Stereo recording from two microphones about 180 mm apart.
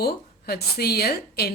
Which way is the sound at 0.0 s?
60° left (ahead or behind).